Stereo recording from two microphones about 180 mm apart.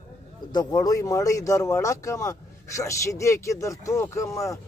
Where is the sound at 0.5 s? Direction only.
20° left (ahead or behind).